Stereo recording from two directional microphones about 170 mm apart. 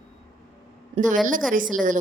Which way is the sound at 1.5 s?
50° right (ahead or behind).